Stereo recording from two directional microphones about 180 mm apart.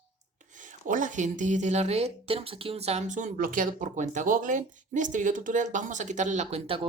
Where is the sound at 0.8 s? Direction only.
45° right (ahead or behind).